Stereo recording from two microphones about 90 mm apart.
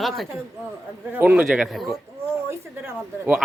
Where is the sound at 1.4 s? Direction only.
5° right (ahead or behind).